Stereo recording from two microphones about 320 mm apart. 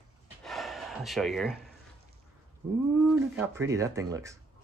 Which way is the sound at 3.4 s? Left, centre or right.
Centre.